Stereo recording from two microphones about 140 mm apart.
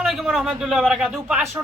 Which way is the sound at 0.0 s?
Centre (ahead or behind).